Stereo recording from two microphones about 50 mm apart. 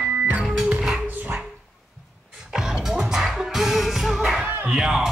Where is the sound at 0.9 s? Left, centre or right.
Right.